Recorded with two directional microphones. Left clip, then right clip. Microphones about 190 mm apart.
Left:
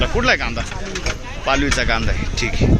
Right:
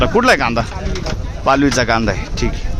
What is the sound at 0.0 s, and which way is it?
Speech, 55° right (ahead or behind).